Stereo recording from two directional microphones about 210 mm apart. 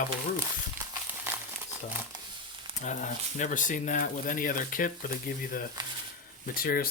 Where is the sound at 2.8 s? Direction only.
35° left (ahead or behind).